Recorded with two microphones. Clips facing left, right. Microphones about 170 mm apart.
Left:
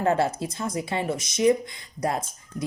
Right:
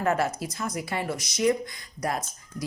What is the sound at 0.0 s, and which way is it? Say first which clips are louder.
Speech: left 3 dB; 30° left (ahead or behind).